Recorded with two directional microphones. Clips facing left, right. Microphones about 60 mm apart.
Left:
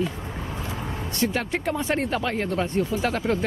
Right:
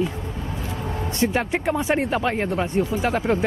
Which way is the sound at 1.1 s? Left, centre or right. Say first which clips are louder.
Right 3 dB; right.